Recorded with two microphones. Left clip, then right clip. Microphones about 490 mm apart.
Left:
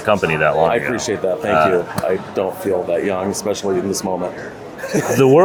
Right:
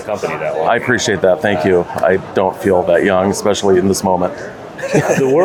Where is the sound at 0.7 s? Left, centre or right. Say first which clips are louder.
Right 4 dB; right.